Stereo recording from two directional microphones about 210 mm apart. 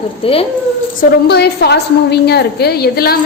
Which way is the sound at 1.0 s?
50° left (ahead or behind).